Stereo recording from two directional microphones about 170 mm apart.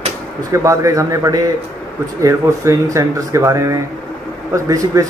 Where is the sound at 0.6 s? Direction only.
20° right (ahead or behind).